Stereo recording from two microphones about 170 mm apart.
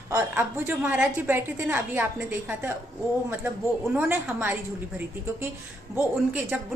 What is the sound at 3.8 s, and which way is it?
Speech, 10° right (ahead or behind).